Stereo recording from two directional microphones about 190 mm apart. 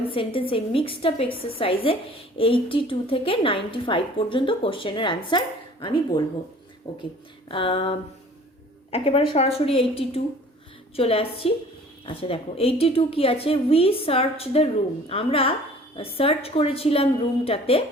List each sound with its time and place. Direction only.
0.3 s a woman's voice: 30° left (ahead or behind)